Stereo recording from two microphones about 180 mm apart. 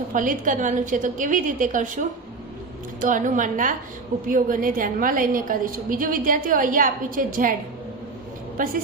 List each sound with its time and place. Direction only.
0.1 s a woman's voice: 45° right (ahead or behind)
8.5 s a woman's voice: 50° right (ahead or behind)